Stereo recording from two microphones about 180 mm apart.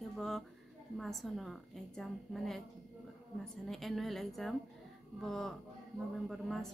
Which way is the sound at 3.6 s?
Centre (ahead or behind).